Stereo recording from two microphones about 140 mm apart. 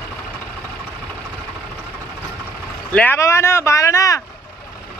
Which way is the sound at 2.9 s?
15° left (ahead or behind).